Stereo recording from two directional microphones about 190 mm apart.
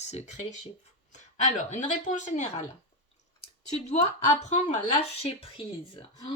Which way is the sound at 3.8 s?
40° left (ahead or behind).